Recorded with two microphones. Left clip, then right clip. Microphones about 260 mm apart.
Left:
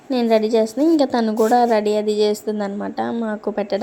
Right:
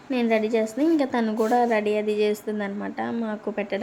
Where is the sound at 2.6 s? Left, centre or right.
Centre.